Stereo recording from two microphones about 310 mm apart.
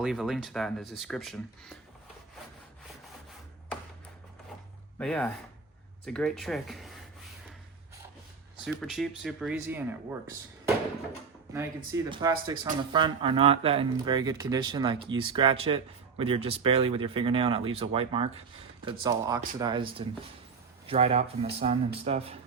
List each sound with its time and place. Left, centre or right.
0.0 s speech: centre
4.9 s speech: centre
8.6 s speech: centre
11.5 s speech: centre